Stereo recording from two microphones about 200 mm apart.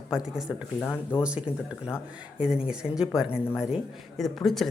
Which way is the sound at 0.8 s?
10° left (ahead or behind).